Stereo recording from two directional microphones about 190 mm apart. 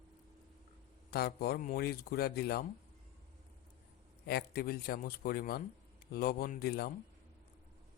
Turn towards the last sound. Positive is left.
turn(degrees=55)  # may be behind; listen again after turning